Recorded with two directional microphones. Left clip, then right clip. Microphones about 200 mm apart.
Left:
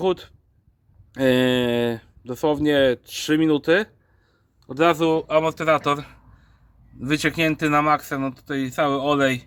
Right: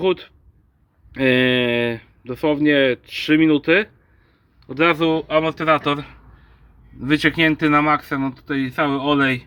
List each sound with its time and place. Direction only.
0.0 s speech: 10° left (ahead or behind)